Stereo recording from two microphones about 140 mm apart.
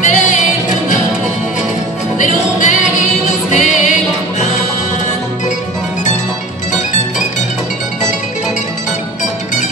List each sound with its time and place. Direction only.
0.0 s music: 60° left (ahead or behind)
2.1 s music: 60° left (ahead or behind)